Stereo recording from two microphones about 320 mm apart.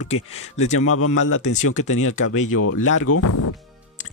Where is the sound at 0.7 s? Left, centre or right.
Left.